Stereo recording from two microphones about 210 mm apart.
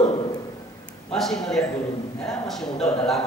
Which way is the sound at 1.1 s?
Centre (ahead or behind).